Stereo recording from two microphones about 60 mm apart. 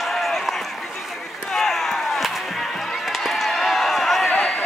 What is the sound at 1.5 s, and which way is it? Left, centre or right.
Chop, centre.